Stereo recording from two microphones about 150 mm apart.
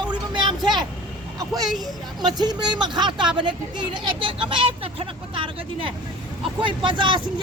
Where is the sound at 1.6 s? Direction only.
Centre (ahead or behind).